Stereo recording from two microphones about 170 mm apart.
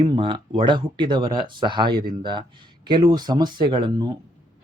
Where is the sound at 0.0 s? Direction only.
30° right (ahead or behind).